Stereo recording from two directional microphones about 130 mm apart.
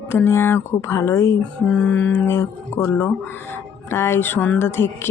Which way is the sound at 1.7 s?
10° left (ahead or behind).